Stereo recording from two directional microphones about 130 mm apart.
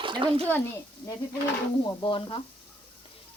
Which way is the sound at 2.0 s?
40° left (ahead or behind).